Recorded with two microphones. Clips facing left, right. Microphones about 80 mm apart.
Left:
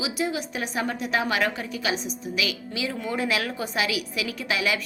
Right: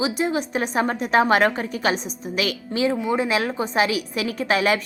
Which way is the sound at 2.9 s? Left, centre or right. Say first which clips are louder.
Right 5 dB; centre.